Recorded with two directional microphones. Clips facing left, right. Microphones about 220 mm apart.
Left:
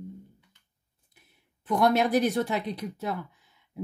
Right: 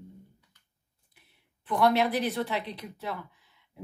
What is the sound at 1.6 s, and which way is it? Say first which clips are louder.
Speech: left 1 dB; 45° left (ahead or behind).